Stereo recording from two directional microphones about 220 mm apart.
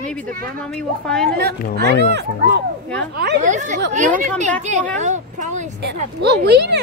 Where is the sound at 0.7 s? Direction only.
5° left (ahead or behind).